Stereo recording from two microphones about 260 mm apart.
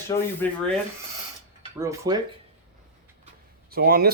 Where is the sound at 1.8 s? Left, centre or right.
Centre.